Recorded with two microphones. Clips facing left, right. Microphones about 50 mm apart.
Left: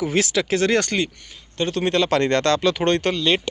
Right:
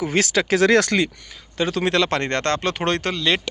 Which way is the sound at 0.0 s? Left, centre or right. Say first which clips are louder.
Right 1 dB; right.